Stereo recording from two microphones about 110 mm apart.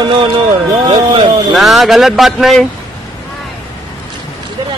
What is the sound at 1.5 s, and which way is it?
Speech, centre (ahead or behind).